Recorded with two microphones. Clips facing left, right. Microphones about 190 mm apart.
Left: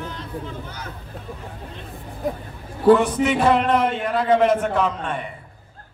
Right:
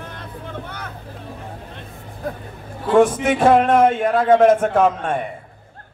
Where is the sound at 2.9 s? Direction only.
50° right (ahead or behind).